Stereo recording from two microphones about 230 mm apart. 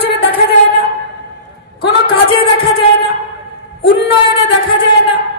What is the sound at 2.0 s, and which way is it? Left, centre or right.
Speech, left.